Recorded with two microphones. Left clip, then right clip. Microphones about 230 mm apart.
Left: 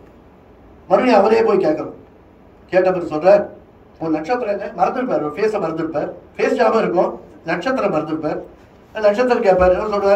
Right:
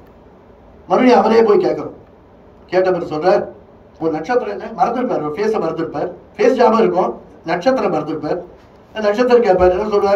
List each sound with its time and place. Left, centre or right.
0.8 s a man's voice: right